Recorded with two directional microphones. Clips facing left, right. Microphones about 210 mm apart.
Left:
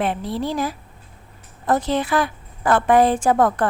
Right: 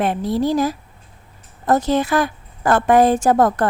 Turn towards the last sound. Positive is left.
turn(degrees=-40)  # may be behind; listen again after turning